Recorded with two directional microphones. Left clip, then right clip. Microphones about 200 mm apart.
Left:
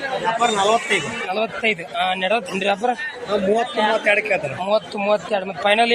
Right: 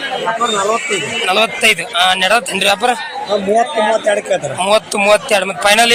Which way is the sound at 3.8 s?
30° right (ahead or behind).